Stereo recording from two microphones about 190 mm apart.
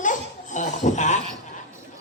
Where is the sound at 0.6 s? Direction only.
40° left (ahead or behind).